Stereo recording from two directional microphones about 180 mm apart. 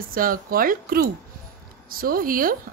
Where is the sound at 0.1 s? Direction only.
50° right (ahead or behind).